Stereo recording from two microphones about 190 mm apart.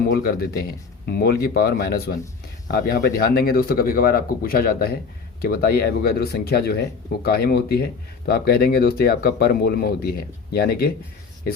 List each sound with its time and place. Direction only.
0.0 s speech: 55° left (ahead or behind)